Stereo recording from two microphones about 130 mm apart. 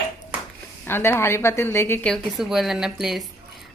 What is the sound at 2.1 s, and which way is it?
Speech, centre (ahead or behind).